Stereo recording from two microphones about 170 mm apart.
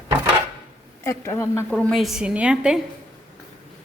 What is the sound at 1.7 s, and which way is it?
A woman's voice, centre (ahead or behind).